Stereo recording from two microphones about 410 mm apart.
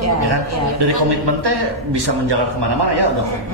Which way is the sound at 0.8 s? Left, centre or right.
Right.